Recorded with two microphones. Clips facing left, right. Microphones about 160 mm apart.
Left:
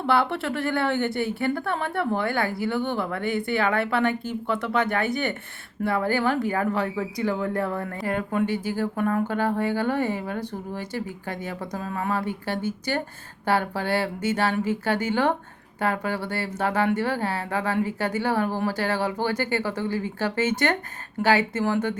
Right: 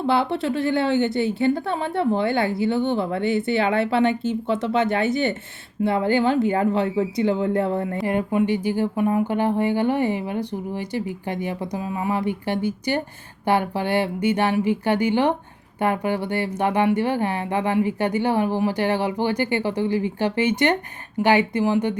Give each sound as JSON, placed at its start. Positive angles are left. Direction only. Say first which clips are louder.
{"t": 0.0, "sound": "a woman's voice", "louder": "right 2 dB", "side_deg": -20}